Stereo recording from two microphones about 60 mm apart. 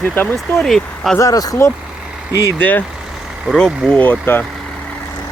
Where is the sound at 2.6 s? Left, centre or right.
Left.